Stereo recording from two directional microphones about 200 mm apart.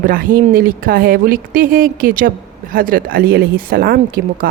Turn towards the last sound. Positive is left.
turn(degrees=-50)  # may be behind; listen again after turning